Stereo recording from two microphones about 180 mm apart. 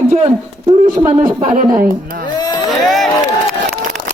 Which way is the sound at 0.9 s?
10° right (ahead or behind).